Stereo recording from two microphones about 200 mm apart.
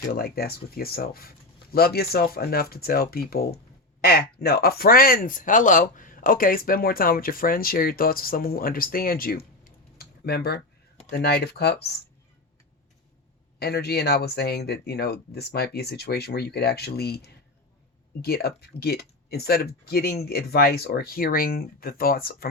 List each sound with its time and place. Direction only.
0.1 s speech: 50° left (ahead or behind)
10.0 s a sound: 50° left (ahead or behind)
11.1 s speech: 55° left (ahead or behind)
13.6 s speech: 55° left (ahead or behind)